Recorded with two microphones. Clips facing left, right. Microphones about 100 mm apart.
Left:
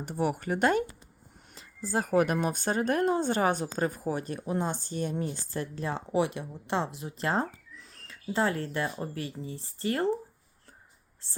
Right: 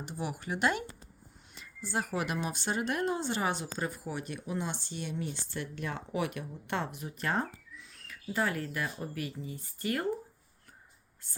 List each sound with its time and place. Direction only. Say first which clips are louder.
0.0 s speech: left 8 dB; 50° left (ahead or behind); by 10.1 s 30° left (ahead or behind)
11.2 s speech: left 5 dB; 25° left (ahead or behind)